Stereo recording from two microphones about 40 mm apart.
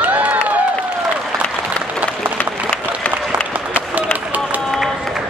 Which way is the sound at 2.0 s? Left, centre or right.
Right.